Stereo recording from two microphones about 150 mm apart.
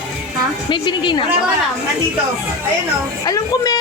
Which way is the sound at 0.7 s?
30° left (ahead or behind).